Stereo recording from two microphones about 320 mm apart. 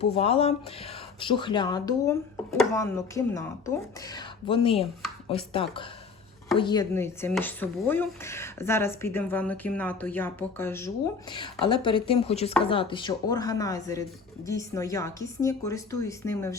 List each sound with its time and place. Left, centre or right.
0.0 s speech: centre